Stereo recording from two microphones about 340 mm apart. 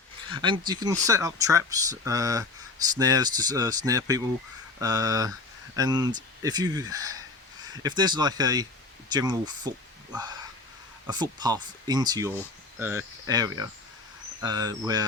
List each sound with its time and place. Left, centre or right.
0.3 s speech: centre